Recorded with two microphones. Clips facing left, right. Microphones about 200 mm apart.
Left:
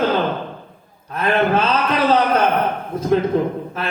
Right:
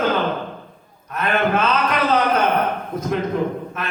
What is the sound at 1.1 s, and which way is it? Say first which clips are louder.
A man's voice: left 2 dB; 30° left (ahead or behind).